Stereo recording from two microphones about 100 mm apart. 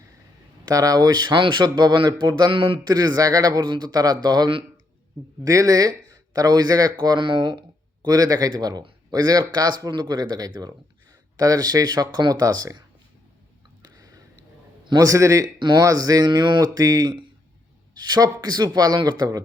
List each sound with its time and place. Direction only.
0.7 s speech: 35° right (ahead or behind)
2.5 s speech: 60° right (ahead or behind)
2.8 s speech: 40° right (ahead or behind)
5.5 s speech: 35° right (ahead or behind)
6.9 s speech: 50° right (ahead or behind)
8.0 s speech: 35° right (ahead or behind)
13.8 s a sound: 40° right (ahead or behind)
14.8 s speech: 35° right (ahead or behind)
15.5 s speech: 50° right (ahead or behind)
15.8 s speech: 35° right (ahead or behind)